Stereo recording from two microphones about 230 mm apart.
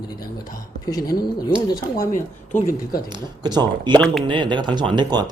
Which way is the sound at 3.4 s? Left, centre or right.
Centre.